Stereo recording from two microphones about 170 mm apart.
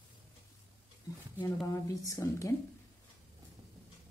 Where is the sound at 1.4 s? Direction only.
20° left (ahead or behind).